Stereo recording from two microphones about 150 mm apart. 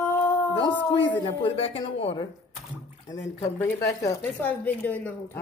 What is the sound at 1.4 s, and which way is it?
Speech, 40° left (ahead or behind).